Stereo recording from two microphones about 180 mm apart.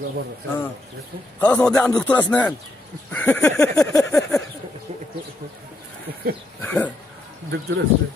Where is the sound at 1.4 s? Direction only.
5° left (ahead or behind).